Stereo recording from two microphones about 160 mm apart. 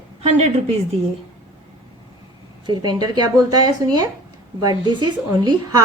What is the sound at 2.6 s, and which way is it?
A woman's voice, 25° right (ahead or behind).